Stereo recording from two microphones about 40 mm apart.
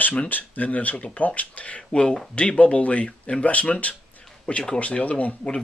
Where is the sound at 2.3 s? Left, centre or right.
Left.